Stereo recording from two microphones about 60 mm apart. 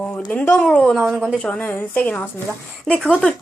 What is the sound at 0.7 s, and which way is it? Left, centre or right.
Speech, centre.